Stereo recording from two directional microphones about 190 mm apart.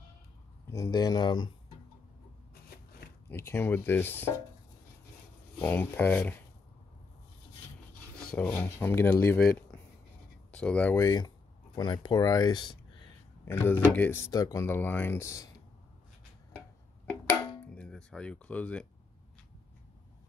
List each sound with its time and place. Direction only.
0.7 s speech: 15° left (ahead or behind)
3.3 s speech: 15° left (ahead or behind)
5.6 s speech: 10° left (ahead or behind)
8.4 s speech: 10° left (ahead or behind)
10.5 s speech: 5° left (ahead or behind); by 13.1 s 25° left (ahead or behind)
13.5 s speech: 10° left (ahead or behind)
17.1 s a sound: 5° left (ahead or behind)